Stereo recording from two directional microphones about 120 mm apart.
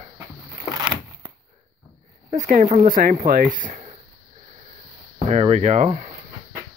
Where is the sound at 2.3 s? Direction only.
90° right.